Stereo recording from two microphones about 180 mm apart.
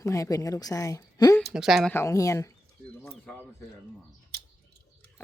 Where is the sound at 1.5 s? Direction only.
Centre (ahead or behind).